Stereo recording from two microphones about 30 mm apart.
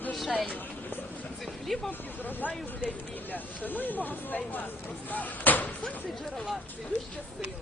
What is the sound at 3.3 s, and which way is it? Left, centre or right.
Speech, left.